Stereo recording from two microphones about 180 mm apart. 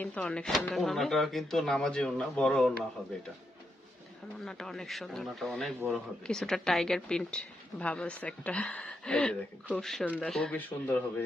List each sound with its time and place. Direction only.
0.0 s a woman's voice: 5° left (ahead or behind)
4.4 s a woman's voice: 5° left (ahead or behind)